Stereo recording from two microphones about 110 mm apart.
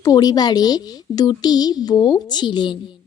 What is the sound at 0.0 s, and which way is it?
A woman's voice, 35° left (ahead or behind).